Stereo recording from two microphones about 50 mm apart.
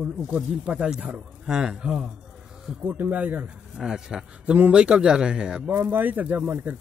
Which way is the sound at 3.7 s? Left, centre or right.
Centre.